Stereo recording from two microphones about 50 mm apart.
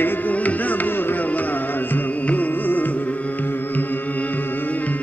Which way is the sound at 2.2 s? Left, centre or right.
Left.